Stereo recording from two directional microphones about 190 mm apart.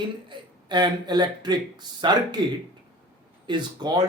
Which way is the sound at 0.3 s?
25° right (ahead or behind).